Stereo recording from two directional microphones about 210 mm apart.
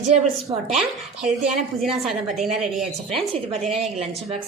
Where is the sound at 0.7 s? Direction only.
Centre (ahead or behind).